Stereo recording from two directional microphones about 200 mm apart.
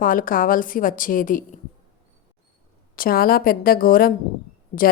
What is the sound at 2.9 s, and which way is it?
Speech, 45° left (ahead or behind).